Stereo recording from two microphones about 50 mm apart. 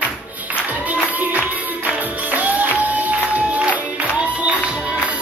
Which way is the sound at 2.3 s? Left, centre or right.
Right.